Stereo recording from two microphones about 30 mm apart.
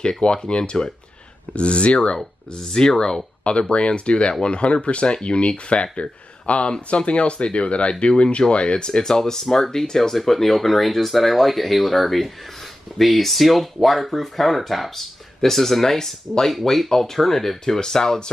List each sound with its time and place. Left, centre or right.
0.2 s speech: left
2.1 s speech: left
3.7 s speech: left; by 10.1 s centre
10.1 s speech: centre